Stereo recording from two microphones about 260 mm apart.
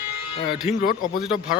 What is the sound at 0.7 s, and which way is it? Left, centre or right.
Speech, left.